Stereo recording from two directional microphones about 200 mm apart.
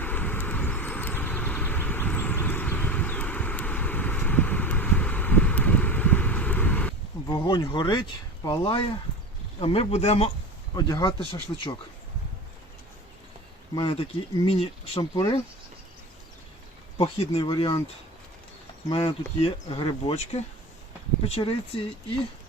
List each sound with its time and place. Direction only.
0.0 s vehicle: 10° left (ahead or behind)
7.3 s speech: 20° left (ahead or behind)
10.8 s speech: 20° left (ahead or behind)
13.7 s speech: 25° left (ahead or behind)
17.0 s speech: 25° left (ahead or behind)
18.9 s speech: 25° left (ahead or behind)